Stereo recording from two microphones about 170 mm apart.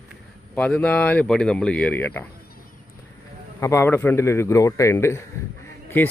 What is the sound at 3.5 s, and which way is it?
A man's voice, 15° left (ahead or behind).